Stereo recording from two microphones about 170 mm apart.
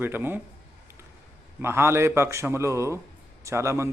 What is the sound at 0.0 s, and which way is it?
Speech, 10° right (ahead or behind).